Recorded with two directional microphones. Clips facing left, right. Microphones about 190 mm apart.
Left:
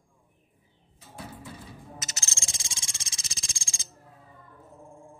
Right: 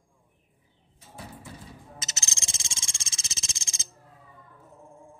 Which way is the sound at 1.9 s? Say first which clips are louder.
Left 1 dB; 25° right (ahead or behind).